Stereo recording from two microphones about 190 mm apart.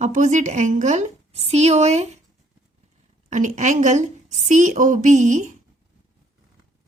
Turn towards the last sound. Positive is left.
turn(degrees=-40)  # may be behind; listen again after turning